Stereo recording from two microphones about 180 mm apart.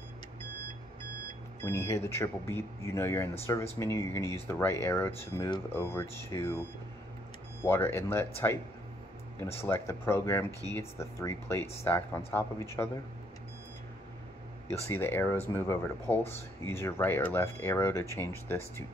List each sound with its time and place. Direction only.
1.6 s speech: 15° left (ahead or behind)
7.6 s speech: 10° left (ahead or behind)
9.6 s speech: 15° left (ahead or behind)
14.9 s speech: 10° left (ahead or behind)